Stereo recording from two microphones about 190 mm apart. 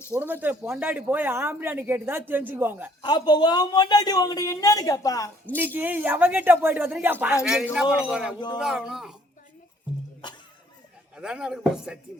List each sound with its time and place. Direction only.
0.1 s speech: 10° right (ahead or behind)
3.0 s a man's voice: 25° left (ahead or behind)
5.5 s speech: 10° right (ahead or behind)
11.2 s speech: 5° right (ahead or behind)